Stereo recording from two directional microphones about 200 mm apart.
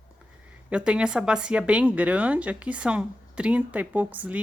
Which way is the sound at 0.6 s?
5° right (ahead or behind).